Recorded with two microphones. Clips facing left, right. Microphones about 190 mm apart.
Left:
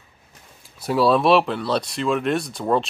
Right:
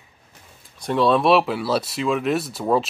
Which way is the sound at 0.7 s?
5° left (ahead or behind).